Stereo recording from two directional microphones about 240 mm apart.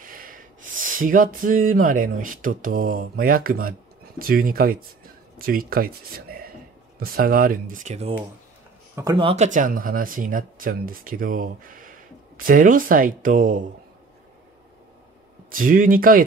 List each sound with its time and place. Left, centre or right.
0.0 s speech: right
9.2 s speech: right
15.5 s speech: right